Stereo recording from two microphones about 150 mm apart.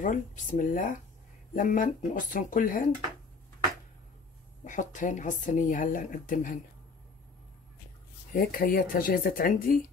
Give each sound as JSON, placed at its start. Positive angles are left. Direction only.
{"t": 0.0, "sound": "speech", "side_deg": 60}
{"t": 4.6, "sound": "speech", "side_deg": 55}
{"t": 8.3, "sound": "speech", "side_deg": 75}